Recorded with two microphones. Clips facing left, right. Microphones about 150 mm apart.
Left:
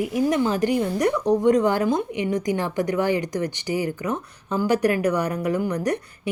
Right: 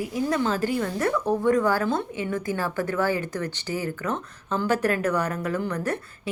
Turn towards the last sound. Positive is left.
turn(degrees=15)  # may be behind; listen again after turning